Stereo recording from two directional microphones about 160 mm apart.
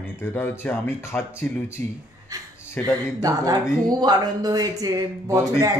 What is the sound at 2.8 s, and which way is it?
Speech, 10° left (ahead or behind).